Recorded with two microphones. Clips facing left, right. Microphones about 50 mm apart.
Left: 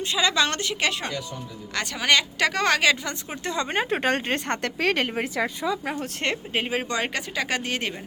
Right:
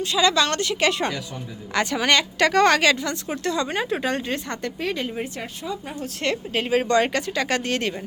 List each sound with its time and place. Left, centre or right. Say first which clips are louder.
0.0 s a woman's voice: right 3 dB; centre
3.1 s a woman's voice: right 5 dB; left
4.6 s a woman's voice: left 3 dB; left
5.6 s speech: left 2 dB; left
6.3 s a woman's voice: right 4 dB; centre